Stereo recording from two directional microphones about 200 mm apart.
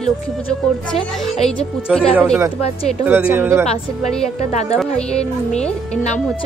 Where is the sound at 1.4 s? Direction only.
5° left (ahead or behind).